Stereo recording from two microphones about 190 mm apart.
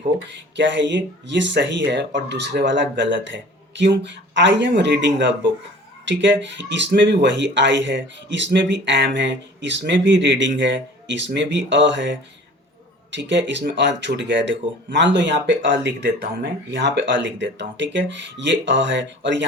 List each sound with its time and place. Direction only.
0.5 s speech: 70° right (ahead or behind)